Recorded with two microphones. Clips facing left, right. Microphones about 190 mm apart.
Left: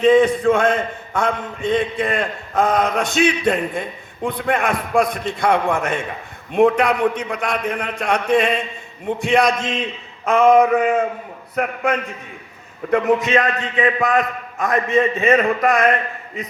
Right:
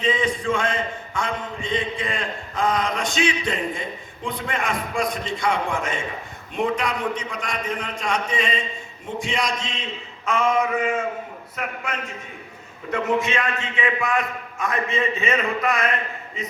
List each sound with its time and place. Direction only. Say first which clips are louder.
0.0 s a man's voice: left 10 dB; 55° left (ahead or behind)
13.2 s a man's voice: left 7 dB; 40° left (ahead or behind)
15.2 s speech: left 7 dB; 55° left (ahead or behind)